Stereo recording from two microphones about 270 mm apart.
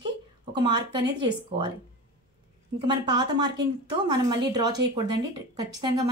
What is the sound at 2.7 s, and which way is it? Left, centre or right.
A woman's voice, centre.